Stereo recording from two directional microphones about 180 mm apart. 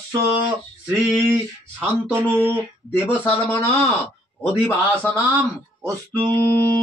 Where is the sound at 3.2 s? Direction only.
10° left (ahead or behind).